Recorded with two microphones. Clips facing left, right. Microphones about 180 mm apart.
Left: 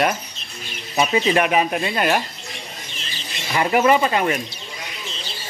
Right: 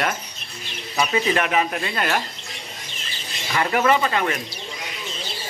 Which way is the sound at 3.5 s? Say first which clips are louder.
Left 3 dB; 20° left (ahead or behind).